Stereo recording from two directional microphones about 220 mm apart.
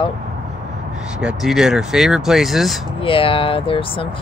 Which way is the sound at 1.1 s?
5° right (ahead or behind).